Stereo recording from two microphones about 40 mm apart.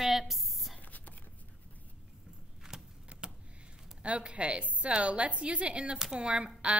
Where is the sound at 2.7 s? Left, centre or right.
Centre.